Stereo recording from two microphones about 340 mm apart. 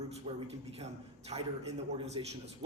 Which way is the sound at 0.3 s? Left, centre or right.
Centre.